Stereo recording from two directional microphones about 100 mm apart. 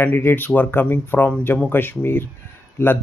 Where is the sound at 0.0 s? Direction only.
20° left (ahead or behind).